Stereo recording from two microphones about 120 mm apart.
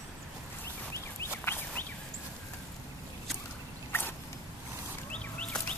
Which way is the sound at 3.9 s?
20° left (ahead or behind).